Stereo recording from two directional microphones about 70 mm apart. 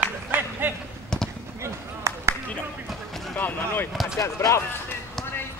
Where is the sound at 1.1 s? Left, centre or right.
Centre.